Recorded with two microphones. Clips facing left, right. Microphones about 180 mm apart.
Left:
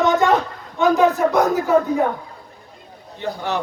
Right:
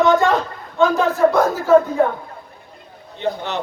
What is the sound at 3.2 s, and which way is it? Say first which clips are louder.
Speech: right 1 dB; 20° right (ahead or behind).